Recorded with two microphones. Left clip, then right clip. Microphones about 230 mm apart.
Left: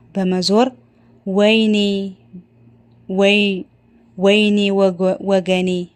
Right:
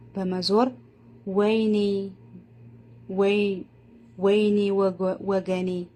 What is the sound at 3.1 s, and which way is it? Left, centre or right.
A man's voice, left.